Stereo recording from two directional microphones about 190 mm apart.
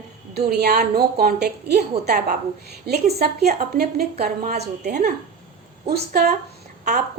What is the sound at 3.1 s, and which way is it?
A woman's voice, 55° right (ahead or behind).